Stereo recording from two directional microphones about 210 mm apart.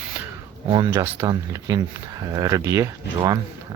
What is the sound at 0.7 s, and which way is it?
Speech, 15° right (ahead or behind).